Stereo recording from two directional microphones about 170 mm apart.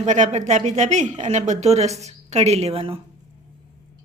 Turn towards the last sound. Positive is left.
turn(degrees=-35)  # may be behind; listen again after turning